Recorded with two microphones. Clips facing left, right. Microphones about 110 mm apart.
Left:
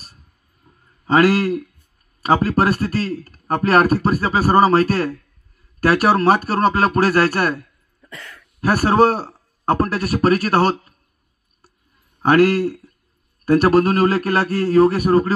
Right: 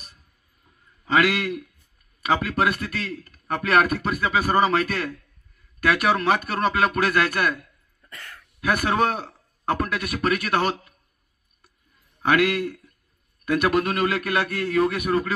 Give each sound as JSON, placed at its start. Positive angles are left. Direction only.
{"t": 0.7, "sound": "a sound", "side_deg": 35}
{"t": 2.2, "sound": "a man's voice", "side_deg": 35}
{"t": 12.2, "sound": "speech", "side_deg": 35}